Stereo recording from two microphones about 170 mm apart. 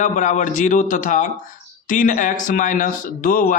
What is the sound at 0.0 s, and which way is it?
Speech, 45° left (ahead or behind).